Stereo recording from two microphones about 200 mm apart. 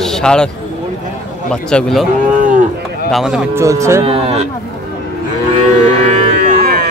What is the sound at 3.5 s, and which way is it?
Speech, 15° right (ahead or behind).